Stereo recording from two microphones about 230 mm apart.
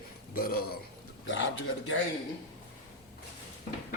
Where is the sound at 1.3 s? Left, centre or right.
Left.